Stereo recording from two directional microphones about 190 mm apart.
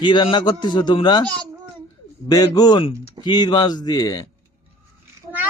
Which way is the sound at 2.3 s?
20° left (ahead or behind).